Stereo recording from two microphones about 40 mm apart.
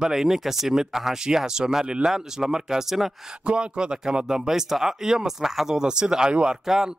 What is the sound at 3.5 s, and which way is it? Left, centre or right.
Speech, right.